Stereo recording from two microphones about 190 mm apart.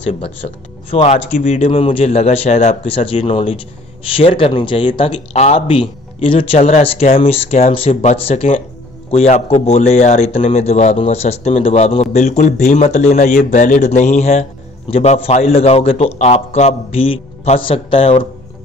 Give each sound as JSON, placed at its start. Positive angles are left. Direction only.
{"t": 0.9, "sound": "a man's voice", "side_deg": 35}